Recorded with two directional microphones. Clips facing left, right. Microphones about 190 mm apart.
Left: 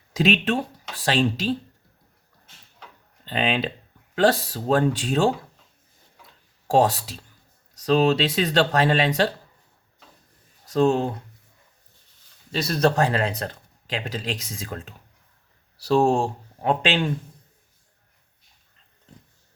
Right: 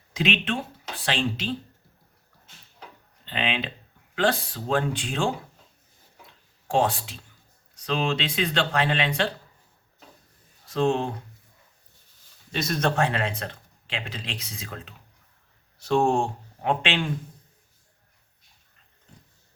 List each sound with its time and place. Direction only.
0.1 s speech: 40° left (ahead or behind)
3.2 s speech: 40° left (ahead or behind)
6.7 s speech: 40° left (ahead or behind)
10.7 s speech: 40° left (ahead or behind)
12.5 s speech: 35° left (ahead or behind)